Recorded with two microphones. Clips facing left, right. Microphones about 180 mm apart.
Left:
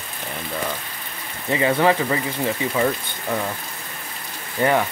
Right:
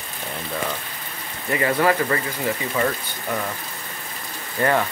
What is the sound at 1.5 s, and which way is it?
Speech, 15° left (ahead or behind).